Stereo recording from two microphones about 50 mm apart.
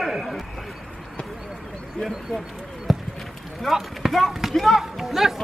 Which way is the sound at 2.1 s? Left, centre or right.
Centre.